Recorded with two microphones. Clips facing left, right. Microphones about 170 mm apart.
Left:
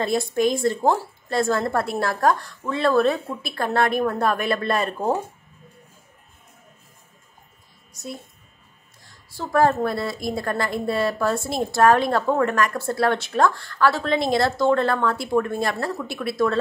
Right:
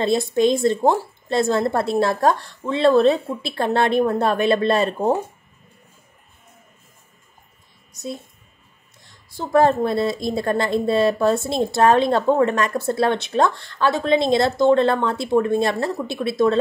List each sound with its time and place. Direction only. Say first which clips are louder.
0.0 s a woman's voice: right 3 dB; 25° right (ahead or behind)
9.0 s a woman's voice: right 2 dB; 20° right (ahead or behind)